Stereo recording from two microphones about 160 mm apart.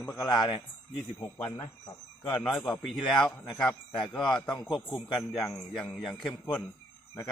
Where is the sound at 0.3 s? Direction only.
25° left (ahead or behind).